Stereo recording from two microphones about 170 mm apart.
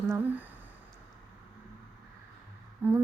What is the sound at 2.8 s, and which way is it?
Speech, 10° right (ahead or behind).